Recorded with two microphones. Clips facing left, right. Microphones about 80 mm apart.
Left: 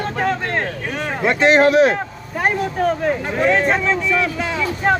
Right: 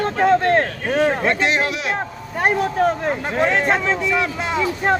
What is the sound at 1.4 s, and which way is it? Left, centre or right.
Speech, left.